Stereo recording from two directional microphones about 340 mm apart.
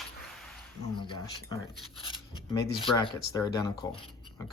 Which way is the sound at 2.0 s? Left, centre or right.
Centre.